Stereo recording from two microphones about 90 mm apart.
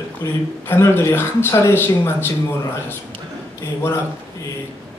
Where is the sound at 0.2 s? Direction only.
30° left (ahead or behind).